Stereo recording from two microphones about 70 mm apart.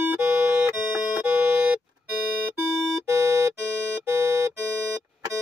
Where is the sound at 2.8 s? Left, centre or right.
Centre.